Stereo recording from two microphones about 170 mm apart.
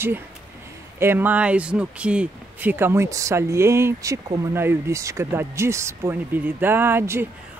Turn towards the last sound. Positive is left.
turn(degrees=-15)  # may be behind; listen again after turning